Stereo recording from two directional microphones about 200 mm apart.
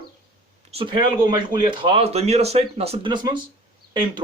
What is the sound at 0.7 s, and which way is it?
Speech, 25° right (ahead or behind).